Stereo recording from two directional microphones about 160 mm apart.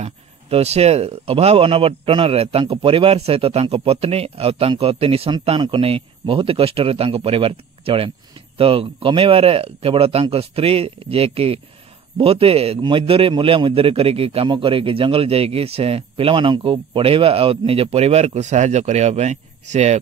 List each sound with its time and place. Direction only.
0.0 s speech: 40° right (ahead or behind)